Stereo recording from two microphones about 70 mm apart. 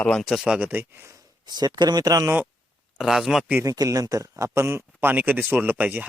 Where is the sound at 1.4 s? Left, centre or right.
Right.